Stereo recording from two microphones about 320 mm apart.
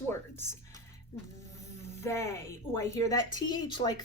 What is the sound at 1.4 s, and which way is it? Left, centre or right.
Speech, centre.